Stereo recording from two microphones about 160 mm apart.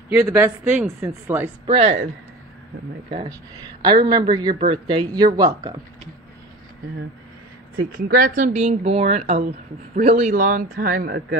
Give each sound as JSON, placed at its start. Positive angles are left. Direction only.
{"t": 0.1, "sound": "speech", "side_deg": -10}
{"t": 1.7, "sound": "speech", "side_deg": -35}
{"t": 3.8, "sound": "speech", "side_deg": -25}
{"t": 7.9, "sound": "speech", "side_deg": -60}
{"t": 8.5, "sound": "speech", "side_deg": -40}
{"t": 10.3, "sound": "speech", "side_deg": -55}